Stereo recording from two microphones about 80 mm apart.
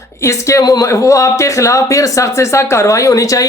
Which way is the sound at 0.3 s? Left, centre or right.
Left.